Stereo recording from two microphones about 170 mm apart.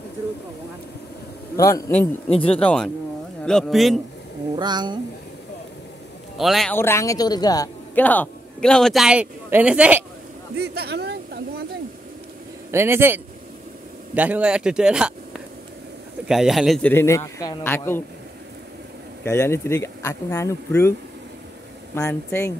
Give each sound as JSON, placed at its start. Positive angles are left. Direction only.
{"t": 1.6, "sound": "a man's voice", "side_deg": 20}
{"t": 4.6, "sound": "speech", "side_deg": -25}
{"t": 6.3, "sound": "a man's voice", "side_deg": 0}
{"t": 6.7, "sound": "a woman's voice", "side_deg": 15}
{"t": 7.9, "sound": "a man's voice", "side_deg": 10}
{"t": 10.6, "sound": "a sound", "side_deg": -75}
{"t": 12.7, "sound": "a man's voice", "side_deg": -15}
{"t": 16.9, "sound": "speech", "side_deg": 15}
{"t": 19.2, "sound": "speech", "side_deg": 15}
{"t": 21.9, "sound": "speech", "side_deg": 15}